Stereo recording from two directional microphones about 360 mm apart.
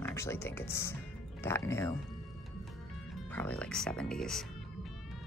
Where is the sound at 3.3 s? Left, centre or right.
Centre.